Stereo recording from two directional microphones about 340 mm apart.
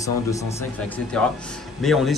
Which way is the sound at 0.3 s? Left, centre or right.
Centre.